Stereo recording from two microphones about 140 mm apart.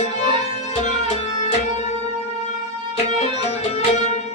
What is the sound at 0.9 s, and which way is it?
Music, 50° left (ahead or behind).